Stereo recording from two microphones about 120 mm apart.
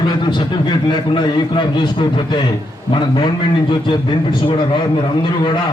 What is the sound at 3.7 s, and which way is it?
Speech, 40° left (ahead or behind).